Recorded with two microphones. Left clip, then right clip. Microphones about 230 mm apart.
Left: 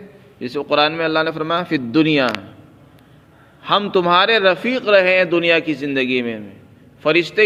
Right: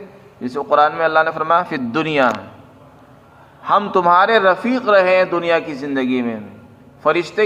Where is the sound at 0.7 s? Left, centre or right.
Left.